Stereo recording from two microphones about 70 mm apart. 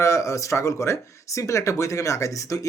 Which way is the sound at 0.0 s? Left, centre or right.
Left.